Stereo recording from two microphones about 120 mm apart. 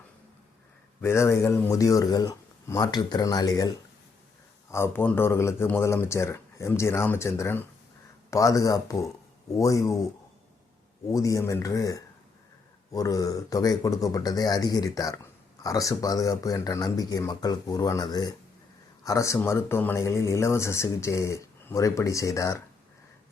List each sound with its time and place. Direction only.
1.0 s speech: 25° left (ahead or behind)
4.7 s speech: 20° left (ahead or behind)
11.1 s speech: 25° left (ahead or behind)